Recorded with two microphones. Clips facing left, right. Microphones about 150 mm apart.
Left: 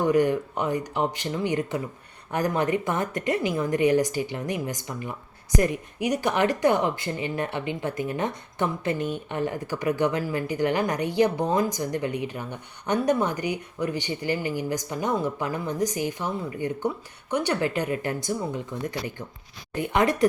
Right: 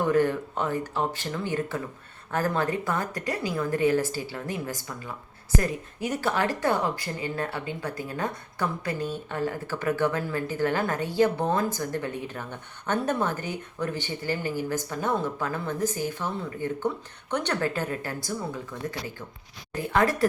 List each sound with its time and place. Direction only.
0.1 s a woman's voice: 15° left (ahead or behind)